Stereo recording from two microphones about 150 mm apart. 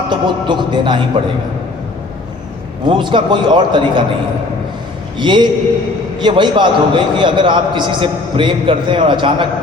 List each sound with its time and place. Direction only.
0.1 s a man's voice: 30° right (ahead or behind)
2.8 s a man's voice: 35° right (ahead or behind)
5.2 s a man's voice: 30° right (ahead or behind)